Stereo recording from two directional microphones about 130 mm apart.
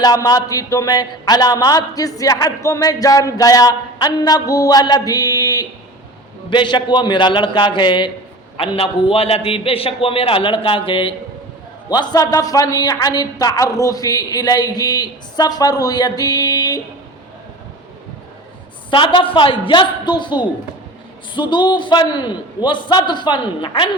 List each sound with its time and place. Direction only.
0.0 s a man's voice: 30° left (ahead or behind)
6.5 s a man's voice: 35° left (ahead or behind)
18.9 s a man's voice: 40° left (ahead or behind)